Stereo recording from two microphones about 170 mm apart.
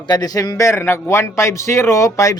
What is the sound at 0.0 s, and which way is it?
Speech, 25° left (ahead or behind).